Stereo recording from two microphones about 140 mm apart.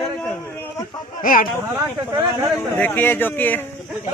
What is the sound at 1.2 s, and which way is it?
Speech, 85° left.